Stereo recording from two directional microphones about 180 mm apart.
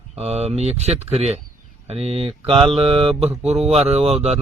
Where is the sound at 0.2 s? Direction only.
35° right (ahead or behind).